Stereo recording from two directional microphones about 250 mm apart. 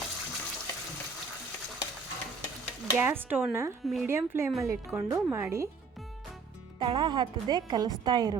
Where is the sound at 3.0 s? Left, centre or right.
Centre.